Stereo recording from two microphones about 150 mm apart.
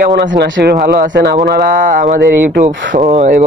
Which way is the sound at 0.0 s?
85° right.